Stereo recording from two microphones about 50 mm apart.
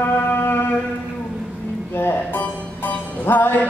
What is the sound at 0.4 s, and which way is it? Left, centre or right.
Music, left.